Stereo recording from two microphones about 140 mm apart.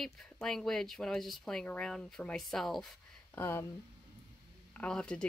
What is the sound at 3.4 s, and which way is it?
Speech, 15° left (ahead or behind).